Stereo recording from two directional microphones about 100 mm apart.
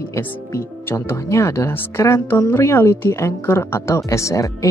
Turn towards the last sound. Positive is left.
turn(degrees=30)  # may be behind; listen again after turning